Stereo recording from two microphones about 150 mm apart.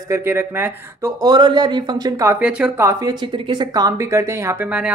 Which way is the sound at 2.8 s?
25° right (ahead or behind).